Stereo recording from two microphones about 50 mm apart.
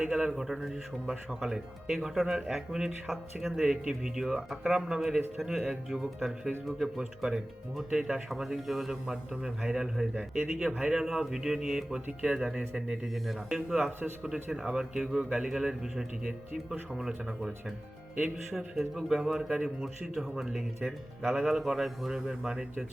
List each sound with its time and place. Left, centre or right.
0.0 s speech: centre
0.4 s a man's voice: centre
6.9 s speech: centre
8.3 s a man's voice: centre
13.1 s speech: centre
18.5 s a man's voice: centre